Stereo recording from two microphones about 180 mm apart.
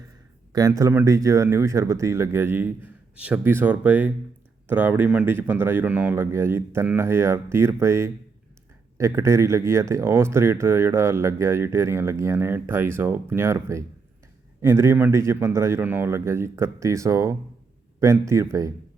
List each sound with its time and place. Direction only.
0.5 s speech: 20° right (ahead or behind)